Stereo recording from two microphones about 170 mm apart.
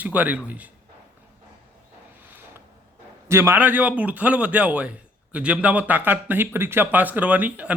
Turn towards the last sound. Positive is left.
turn(degrees=-10)  # may be behind; listen again after turning